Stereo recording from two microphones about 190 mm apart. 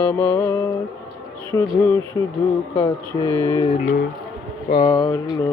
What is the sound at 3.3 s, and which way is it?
Mantra, 10° left (ahead or behind).